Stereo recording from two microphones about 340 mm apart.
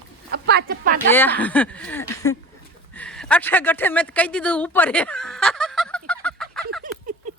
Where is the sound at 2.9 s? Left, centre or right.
Centre.